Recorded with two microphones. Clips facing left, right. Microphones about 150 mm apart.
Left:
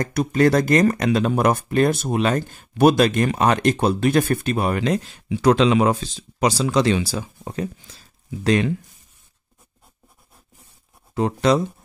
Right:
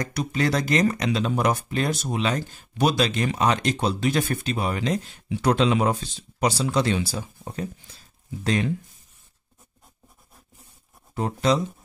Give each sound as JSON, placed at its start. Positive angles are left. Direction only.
{"t": 0.0, "sound": "speech", "side_deg": 50}
{"t": 11.1, "sound": "speech", "side_deg": 80}